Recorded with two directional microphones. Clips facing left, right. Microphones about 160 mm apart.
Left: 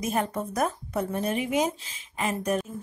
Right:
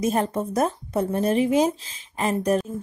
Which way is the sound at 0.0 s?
30° right (ahead or behind).